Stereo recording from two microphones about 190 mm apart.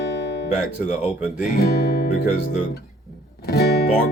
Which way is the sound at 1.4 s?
55° left (ahead or behind).